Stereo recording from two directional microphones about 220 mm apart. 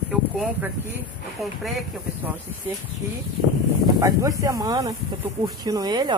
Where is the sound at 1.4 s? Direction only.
Centre (ahead or behind).